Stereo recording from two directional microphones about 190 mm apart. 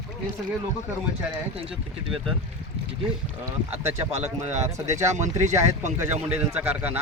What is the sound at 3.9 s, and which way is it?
Speech, 35° right (ahead or behind).